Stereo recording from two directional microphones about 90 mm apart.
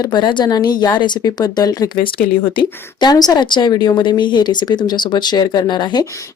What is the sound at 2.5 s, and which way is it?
Speech, 55° left (ahead or behind).